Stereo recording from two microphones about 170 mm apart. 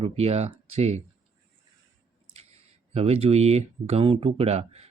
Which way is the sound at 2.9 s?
35° right (ahead or behind).